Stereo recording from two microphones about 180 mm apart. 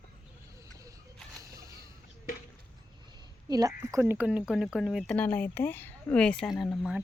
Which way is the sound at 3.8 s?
15° right (ahead or behind).